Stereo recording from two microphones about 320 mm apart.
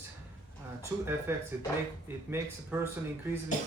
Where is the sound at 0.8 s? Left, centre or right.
Centre.